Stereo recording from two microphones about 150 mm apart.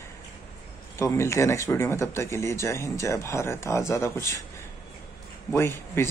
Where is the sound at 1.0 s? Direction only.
20° left (ahead or behind).